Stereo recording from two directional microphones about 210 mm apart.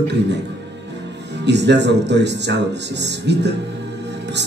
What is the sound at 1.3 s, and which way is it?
Speech, 55° right (ahead or behind).